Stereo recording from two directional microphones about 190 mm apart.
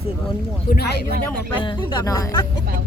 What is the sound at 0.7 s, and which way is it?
Speech, 60° left (ahead or behind).